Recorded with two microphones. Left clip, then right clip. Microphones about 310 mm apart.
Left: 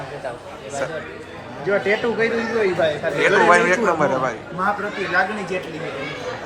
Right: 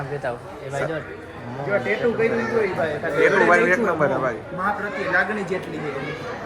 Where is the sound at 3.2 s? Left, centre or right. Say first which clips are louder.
Left 2 dB; centre.